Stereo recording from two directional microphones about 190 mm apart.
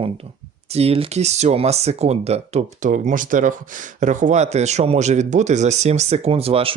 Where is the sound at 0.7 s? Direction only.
30° right (ahead or behind).